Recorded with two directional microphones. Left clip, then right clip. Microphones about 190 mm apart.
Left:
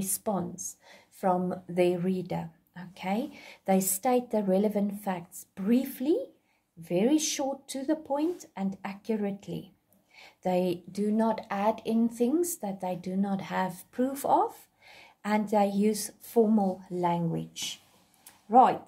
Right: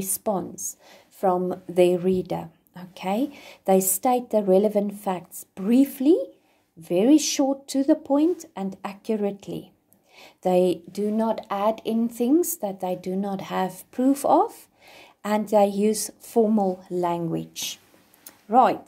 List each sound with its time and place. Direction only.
0.0 s speech: 25° right (ahead or behind); by 18.8 s 50° right (ahead or behind)